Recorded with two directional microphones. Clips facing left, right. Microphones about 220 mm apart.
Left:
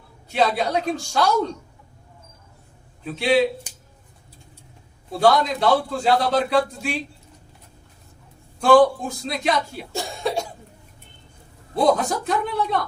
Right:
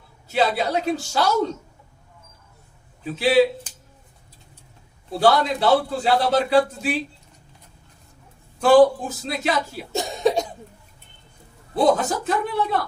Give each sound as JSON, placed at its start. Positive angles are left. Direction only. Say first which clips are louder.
{"t": 0.3, "sound": "a man's voice", "louder": "even", "side_deg": 0}
{"t": 3.0, "sound": "a man's voice", "louder": "right 2 dB", "side_deg": -5}
{"t": 5.2, "sound": "a man's voice", "louder": "even", "side_deg": 0}
{"t": 8.6, "sound": "a man's voice", "louder": "right 1 dB", "side_deg": -5}
{"t": 9.9, "sound": "cough", "louder": "right 5 dB", "side_deg": -20}
{"t": 11.7, "sound": "a man's voice", "louder": "even", "side_deg": 0}